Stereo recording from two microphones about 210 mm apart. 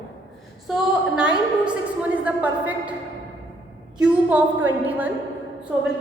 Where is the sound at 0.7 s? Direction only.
5° right (ahead or behind).